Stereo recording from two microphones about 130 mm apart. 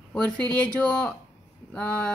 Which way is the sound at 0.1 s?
10° left (ahead or behind).